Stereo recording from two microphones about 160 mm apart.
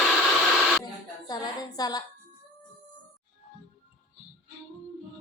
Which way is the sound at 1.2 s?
25° left (ahead or behind).